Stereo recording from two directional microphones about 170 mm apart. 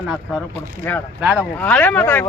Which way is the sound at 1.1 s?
10° right (ahead or behind).